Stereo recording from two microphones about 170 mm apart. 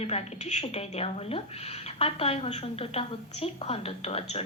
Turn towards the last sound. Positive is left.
turn(degrees=35)  # may be behind; listen again after turning